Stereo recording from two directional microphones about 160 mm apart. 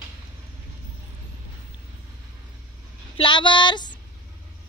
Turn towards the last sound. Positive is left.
turn(degrees=30)  # may be behind; listen again after turning